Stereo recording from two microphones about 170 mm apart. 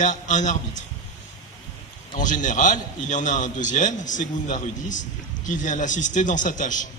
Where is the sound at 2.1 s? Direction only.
50° left (ahead or behind).